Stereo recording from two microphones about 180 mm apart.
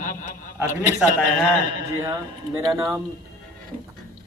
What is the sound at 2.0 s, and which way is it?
Speech, 20° right (ahead or behind).